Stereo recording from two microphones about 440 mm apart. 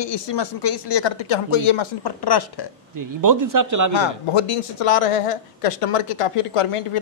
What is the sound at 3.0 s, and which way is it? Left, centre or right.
Speech, right.